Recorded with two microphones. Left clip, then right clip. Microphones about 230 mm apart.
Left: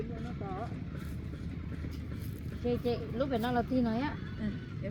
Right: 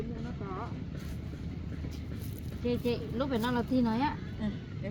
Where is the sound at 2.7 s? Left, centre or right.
Right.